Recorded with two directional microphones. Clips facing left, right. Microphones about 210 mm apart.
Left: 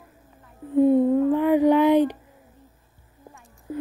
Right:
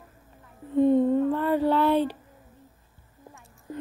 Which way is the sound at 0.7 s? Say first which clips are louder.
Left 3 dB; 5° left (ahead or behind).